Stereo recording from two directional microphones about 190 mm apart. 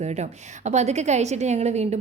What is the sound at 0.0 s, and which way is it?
A woman's voice, 35° right (ahead or behind).